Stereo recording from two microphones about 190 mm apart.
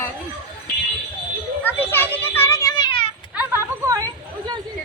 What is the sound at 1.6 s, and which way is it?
Children playing, 10° left (ahead or behind).